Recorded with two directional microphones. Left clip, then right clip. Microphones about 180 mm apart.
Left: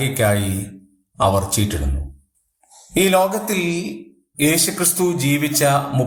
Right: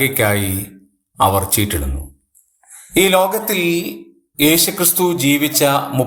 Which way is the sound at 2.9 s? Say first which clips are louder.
Right 3 dB; 25° right (ahead or behind).